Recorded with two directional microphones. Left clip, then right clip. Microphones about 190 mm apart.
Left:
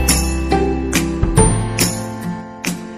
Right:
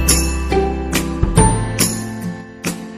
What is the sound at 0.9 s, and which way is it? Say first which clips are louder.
Music: left 2 dB; centre (ahead or behind).